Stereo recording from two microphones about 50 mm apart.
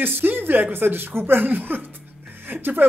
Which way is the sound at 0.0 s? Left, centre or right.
Right.